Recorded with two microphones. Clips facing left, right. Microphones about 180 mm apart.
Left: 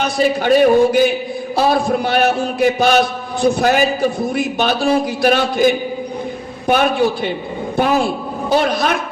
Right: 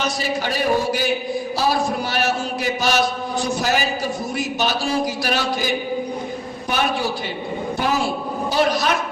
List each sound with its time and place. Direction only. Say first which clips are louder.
0.0 s a man's voice: left 7 dB; 55° left (ahead or behind)